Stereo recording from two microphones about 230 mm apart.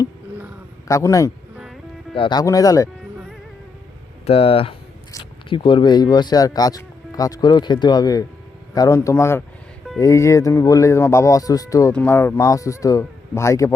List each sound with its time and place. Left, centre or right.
0.9 s speech: centre
4.3 s speech: left